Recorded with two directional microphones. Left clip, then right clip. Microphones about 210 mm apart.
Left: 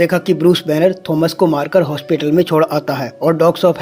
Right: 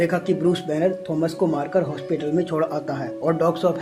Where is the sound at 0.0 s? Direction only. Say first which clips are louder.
Left 8 dB; 35° left (ahead or behind).